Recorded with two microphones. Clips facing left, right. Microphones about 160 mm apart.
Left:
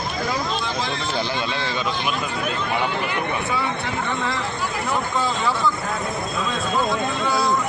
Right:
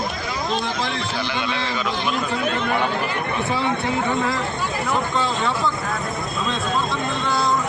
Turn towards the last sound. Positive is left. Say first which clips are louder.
# even
turn(degrees=0)  # may be behind; listen again after turning